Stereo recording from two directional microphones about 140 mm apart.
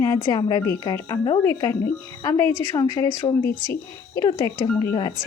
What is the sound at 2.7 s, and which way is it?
Speech, 25° left (ahead or behind).